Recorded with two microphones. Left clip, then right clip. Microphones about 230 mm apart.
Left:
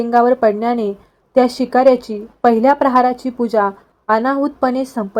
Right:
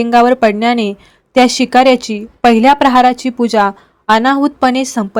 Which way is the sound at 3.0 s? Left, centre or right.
Right.